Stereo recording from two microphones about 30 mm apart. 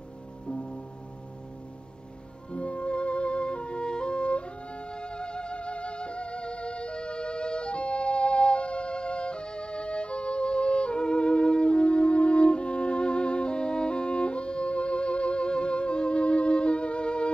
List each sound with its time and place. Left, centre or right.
0.5 s music: left
2.5 s music: left